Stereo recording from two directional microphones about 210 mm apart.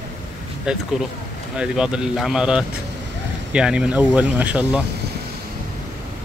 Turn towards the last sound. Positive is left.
turn(degrees=-5)  # may be behind; listen again after turning